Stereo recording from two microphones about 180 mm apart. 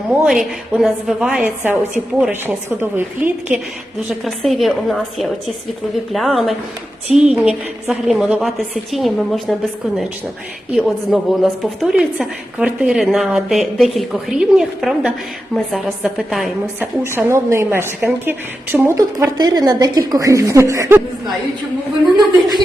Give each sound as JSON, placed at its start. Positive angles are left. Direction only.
{"t": 0.3, "sound": "a woman's voice", "side_deg": 0}
{"t": 4.2, "sound": "a woman's voice", "side_deg": 0}
{"t": 17.0, "sound": "a woman's voice", "side_deg": -15}